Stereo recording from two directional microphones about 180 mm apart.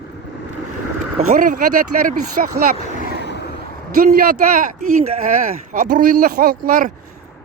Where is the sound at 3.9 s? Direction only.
55° right (ahead or behind).